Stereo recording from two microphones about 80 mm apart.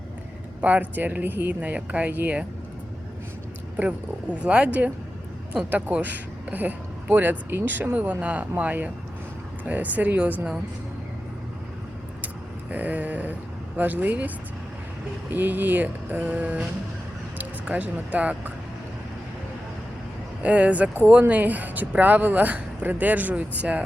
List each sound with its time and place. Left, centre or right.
0.6 s speech: centre
3.8 s speech: centre
12.7 s speech: centre
20.4 s speech: centre